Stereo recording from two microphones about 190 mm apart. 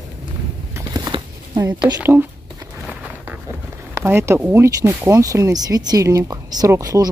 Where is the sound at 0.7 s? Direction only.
15° right (ahead or behind).